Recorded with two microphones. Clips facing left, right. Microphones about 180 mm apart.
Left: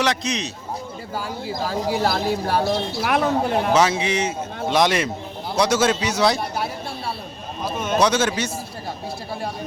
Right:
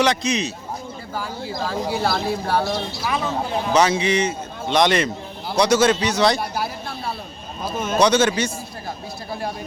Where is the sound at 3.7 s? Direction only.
5° left (ahead or behind).